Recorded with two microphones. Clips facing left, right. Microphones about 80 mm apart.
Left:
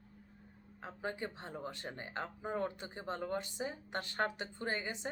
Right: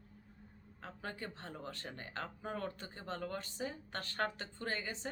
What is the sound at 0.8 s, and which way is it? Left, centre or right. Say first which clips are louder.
Speech: left 4 dB; centre.